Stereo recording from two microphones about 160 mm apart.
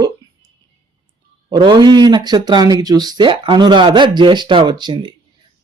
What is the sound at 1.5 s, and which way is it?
Speech, 25° right (ahead or behind).